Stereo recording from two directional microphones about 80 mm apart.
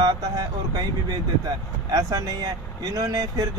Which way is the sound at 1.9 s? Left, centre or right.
Right.